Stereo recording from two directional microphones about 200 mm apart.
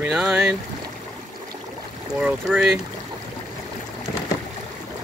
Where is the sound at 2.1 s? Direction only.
5° right (ahead or behind).